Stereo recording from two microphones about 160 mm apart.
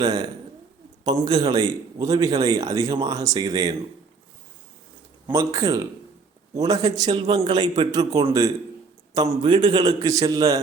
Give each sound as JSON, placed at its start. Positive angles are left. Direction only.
{"t": 0.0, "sound": "a man's voice", "side_deg": -25}
{"t": 5.3, "sound": "a man's voice", "side_deg": -20}